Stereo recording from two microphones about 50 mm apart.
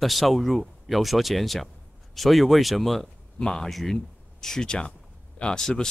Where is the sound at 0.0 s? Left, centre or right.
Centre.